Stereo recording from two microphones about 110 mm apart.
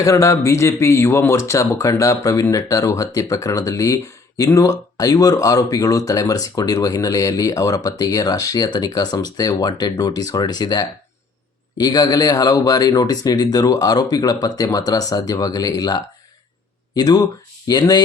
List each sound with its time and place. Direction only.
0.0 s speech: 30° left (ahead or behind)